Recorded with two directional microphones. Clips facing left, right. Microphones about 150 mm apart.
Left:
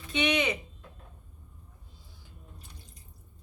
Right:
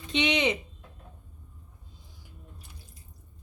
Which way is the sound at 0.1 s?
20° right (ahead or behind).